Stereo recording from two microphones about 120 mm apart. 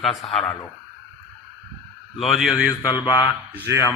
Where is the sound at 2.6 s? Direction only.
30° left (ahead or behind).